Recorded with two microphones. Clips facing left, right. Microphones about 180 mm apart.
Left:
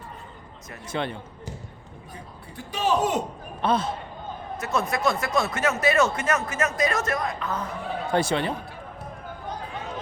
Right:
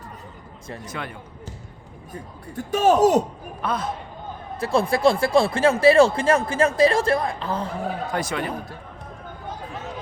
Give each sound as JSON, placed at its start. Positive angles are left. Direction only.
{"t": 0.9, "sound": "speech", "side_deg": 25}
{"t": 2.6, "sound": "a man's voice", "side_deg": -45}
{"t": 3.6, "sound": "speech", "side_deg": 30}
{"t": 4.5, "sound": "speech", "side_deg": -30}
{"t": 8.1, "sound": "speech", "side_deg": 30}